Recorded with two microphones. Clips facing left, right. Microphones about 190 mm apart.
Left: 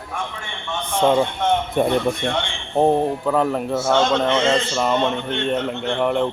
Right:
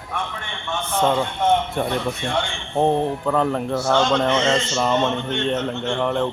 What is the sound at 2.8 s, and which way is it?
Speech, 5° left (ahead or behind).